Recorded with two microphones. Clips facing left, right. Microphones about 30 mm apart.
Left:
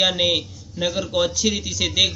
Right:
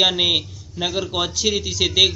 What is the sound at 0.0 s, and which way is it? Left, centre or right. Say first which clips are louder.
A man's voice: right 2 dB; centre.